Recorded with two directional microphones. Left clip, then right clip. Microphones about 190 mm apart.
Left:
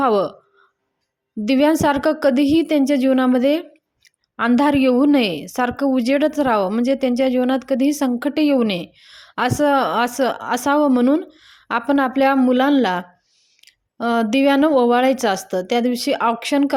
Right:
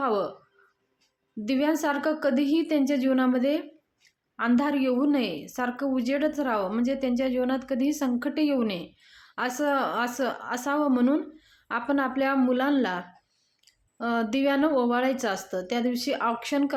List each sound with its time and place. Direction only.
0.0 s a woman's voice: 40° left (ahead or behind)
1.5 s a woman's voice: 40° left (ahead or behind)